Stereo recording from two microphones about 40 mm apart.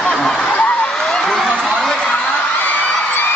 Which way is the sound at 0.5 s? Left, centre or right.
Left.